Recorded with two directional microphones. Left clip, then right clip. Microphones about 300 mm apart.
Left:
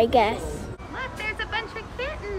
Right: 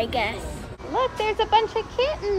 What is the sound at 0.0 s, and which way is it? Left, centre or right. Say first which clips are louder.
Speech: left 5 dB; centre.